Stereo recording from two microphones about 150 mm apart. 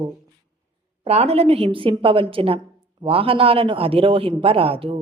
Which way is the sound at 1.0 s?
45° right (ahead or behind).